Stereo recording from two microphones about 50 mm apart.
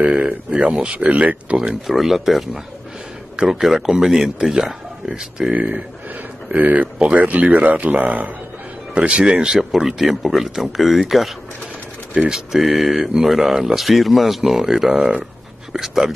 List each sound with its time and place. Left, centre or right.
0.1 s speech: right
1.9 s speech: centre
5.5 s speech: right
8.9 s speech: centre
12.1 s speech: centre